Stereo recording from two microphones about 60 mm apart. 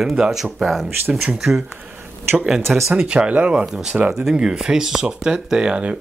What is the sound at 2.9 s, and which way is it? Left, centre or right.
Speech, centre.